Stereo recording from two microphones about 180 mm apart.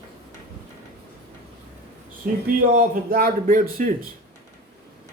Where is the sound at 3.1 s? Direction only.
50° right (ahead or behind).